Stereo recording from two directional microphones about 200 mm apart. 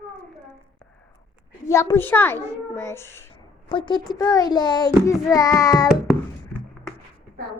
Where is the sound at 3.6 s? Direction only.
25° left (ahead or behind).